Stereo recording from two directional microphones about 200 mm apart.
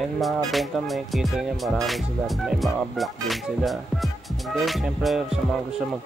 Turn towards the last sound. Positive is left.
turn(degrees=0)  # may be behind; listen again after turning